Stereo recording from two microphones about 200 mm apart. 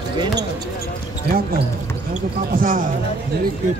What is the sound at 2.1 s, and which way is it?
Speech, 45° right (ahead or behind).